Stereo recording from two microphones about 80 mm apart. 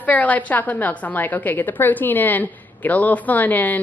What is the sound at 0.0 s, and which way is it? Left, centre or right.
A woman's voice, centre.